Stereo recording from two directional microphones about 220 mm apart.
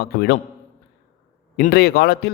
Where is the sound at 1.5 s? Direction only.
45° left (ahead or behind).